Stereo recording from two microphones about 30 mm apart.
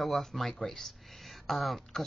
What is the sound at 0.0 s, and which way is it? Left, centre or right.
Speech, centre.